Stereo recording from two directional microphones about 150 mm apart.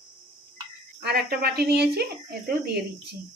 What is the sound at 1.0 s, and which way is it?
Speech, 90° right.